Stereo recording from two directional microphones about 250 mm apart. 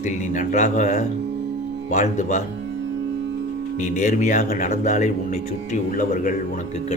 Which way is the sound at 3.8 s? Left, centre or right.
Left.